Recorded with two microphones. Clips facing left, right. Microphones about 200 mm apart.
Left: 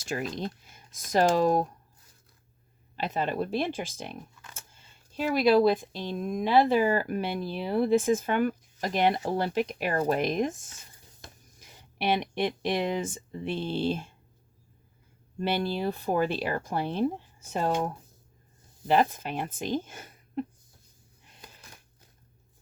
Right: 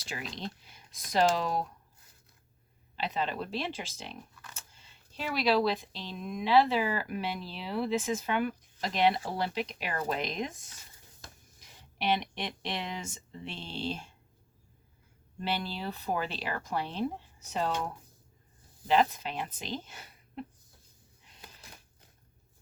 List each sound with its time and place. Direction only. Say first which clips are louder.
0.0 s speech: left 7 dB; 50° left (ahead or behind)
2.9 s speech: left 4 dB; 45° left (ahead or behind)
11.9 s speech: left 4 dB; 50° left (ahead or behind)
15.4 s speech: left 6 dB; 50° left (ahead or behind)
18.9 s speech: left 2 dB; 50° left (ahead or behind)